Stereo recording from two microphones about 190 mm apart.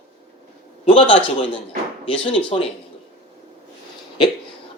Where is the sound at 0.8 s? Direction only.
30° left (ahead or behind).